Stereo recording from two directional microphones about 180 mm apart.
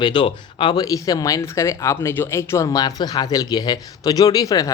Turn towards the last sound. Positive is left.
turn(degrees=20)  # may be behind; listen again after turning